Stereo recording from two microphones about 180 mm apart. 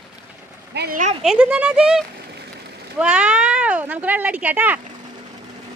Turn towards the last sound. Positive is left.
turn(degrees=-10)  # may be behind; listen again after turning